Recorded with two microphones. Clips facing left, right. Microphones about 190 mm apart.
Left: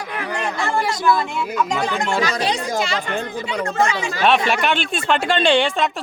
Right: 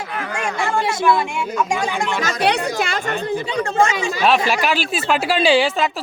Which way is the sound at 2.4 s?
65° right (ahead or behind).